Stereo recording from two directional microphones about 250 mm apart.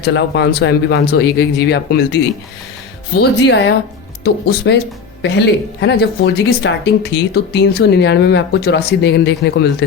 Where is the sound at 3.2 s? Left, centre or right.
Left.